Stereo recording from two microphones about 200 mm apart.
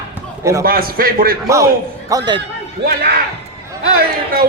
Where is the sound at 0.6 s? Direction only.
45° right (ahead or behind).